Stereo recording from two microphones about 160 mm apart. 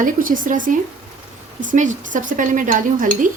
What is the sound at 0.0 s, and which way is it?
Speech, 55° right (ahead or behind).